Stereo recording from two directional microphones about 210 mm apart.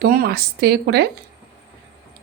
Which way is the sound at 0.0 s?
45° right (ahead or behind).